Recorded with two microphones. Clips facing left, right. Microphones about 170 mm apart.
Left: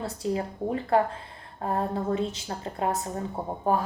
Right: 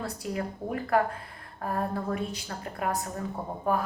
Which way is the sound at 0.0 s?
25° left (ahead or behind).